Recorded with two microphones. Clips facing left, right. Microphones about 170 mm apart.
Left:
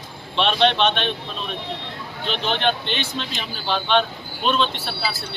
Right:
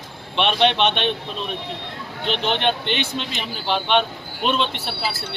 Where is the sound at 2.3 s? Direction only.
20° right (ahead or behind).